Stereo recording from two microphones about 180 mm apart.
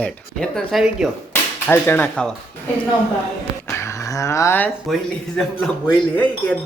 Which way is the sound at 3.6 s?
15° left (ahead or behind).